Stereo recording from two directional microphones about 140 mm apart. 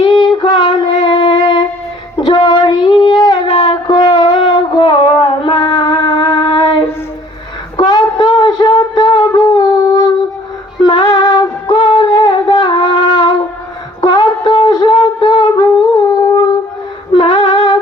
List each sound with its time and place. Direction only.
0.2 s music: 35° left (ahead or behind)
2.1 s child singing: 35° left (ahead or behind)
7.8 s a sound: 30° left (ahead or behind)
17.2 s female singing: 35° left (ahead or behind)